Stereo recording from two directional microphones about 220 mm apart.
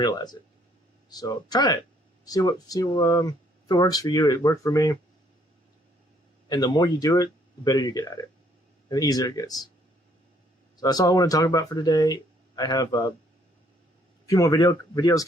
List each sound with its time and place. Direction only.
0.0 s speech: 20° left (ahead or behind)
6.5 s speech: 20° left (ahead or behind)
10.8 s speech: 15° left (ahead or behind)
14.3 s speech: 15° left (ahead or behind)